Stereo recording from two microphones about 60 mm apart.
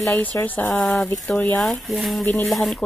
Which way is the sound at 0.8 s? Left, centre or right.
Centre.